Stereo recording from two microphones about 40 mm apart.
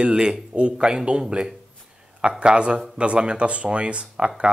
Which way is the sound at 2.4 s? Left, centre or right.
Right.